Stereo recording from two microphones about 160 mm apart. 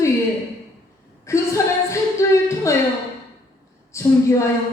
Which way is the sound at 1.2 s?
20° left (ahead or behind).